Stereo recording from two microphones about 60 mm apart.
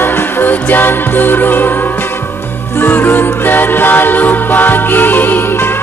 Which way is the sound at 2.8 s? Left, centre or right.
Left.